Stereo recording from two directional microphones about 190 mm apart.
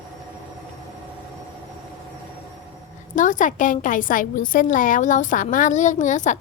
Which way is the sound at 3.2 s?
40° left (ahead or behind).